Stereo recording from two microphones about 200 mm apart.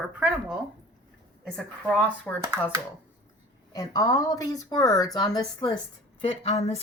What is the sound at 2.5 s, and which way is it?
Speech, 10° right (ahead or behind).